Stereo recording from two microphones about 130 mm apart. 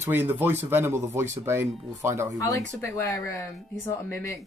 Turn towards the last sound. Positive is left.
turn(degrees=20)  # may be behind; listen again after turning